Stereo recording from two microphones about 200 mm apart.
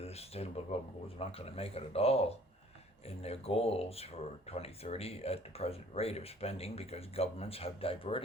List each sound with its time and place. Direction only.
0.0 s speech: 30° left (ahead or behind)